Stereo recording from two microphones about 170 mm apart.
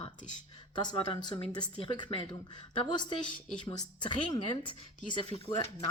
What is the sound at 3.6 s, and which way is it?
A woman's voice, 25° left (ahead or behind).